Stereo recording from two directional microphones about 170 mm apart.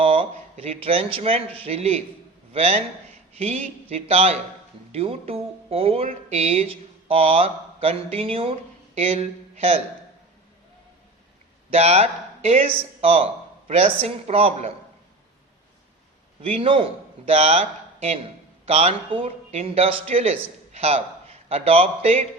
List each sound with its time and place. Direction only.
0.0 s speech: 35° right (ahead or behind)
11.7 s speech: 40° right (ahead or behind)
16.4 s speech: 30° right (ahead or behind)